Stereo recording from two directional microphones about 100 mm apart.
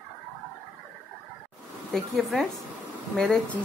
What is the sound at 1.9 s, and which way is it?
Speech, centre (ahead or behind).